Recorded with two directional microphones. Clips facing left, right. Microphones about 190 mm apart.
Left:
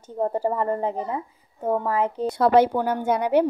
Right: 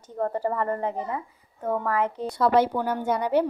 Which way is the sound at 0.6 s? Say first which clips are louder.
Left 2 dB; 5° left (ahead or behind).